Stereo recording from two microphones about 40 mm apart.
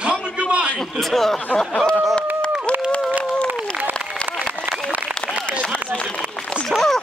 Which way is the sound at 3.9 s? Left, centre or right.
Left.